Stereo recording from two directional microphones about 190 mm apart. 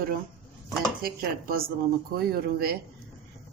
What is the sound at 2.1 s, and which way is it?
Speech, 50° right (ahead or behind).